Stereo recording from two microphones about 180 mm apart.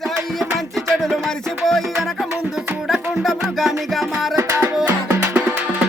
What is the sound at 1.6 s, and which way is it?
Music, centre (ahead or behind).